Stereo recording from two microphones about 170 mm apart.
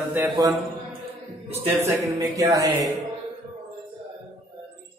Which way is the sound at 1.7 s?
15° right (ahead or behind).